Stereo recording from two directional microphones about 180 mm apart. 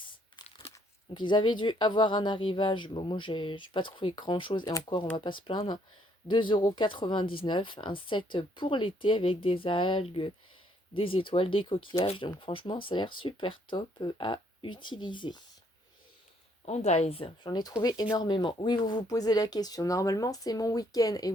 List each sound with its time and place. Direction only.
1.1 s speech: 25° left (ahead or behind)
16.6 s speech: 40° left (ahead or behind); by 21.3 s 20° left (ahead or behind)